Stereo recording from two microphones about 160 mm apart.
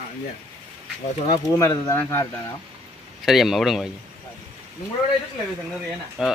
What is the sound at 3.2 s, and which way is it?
Speech, centre (ahead or behind).